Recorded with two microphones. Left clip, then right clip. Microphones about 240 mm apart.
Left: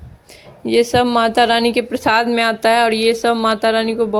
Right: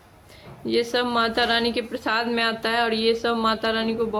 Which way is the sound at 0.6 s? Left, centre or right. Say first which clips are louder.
Left 9 dB; left.